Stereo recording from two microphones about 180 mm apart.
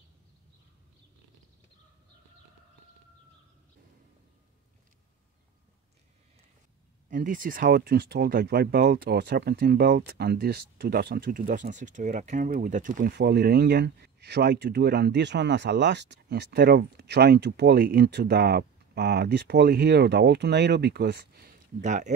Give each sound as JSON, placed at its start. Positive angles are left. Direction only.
{"t": 7.1, "sound": "speech", "side_deg": -50}
{"t": 21.8, "sound": "speech", "side_deg": -40}